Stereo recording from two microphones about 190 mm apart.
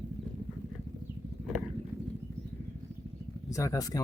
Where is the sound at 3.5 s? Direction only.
15° left (ahead or behind).